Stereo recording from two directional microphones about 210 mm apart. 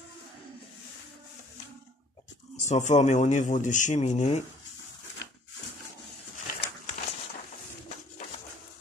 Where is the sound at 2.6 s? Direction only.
35° left (ahead or behind).